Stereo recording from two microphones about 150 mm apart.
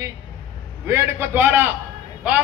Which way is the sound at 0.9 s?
15° right (ahead or behind).